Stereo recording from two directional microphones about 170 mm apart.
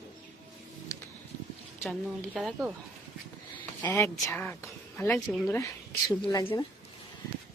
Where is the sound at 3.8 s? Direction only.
15° left (ahead or behind).